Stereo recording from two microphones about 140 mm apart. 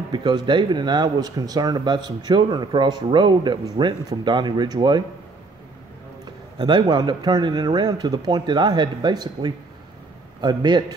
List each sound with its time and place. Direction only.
0.1 s speech: 35° right (ahead or behind)
6.6 s speech: 30° right (ahead or behind)